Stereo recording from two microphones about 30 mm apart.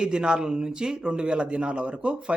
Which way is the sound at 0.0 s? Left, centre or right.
Right.